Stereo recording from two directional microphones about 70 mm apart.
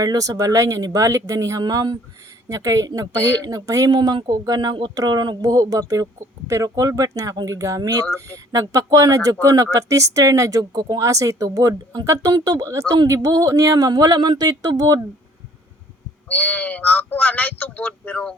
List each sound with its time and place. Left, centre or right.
0.0 s speech: right
2.5 s speech: right
7.8 s speech: right
8.5 s speech: right
16.3 s speech: left